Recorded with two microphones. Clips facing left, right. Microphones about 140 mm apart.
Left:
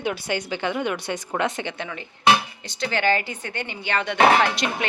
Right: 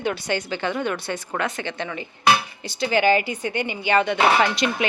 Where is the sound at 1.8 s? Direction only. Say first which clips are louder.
Right 3 dB; centre (ahead or behind).